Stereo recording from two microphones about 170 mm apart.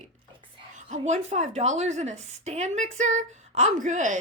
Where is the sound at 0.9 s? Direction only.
45° right (ahead or behind).